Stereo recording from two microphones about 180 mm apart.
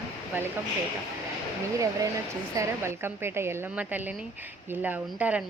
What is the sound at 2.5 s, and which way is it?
A woman's voice, 15° right (ahead or behind).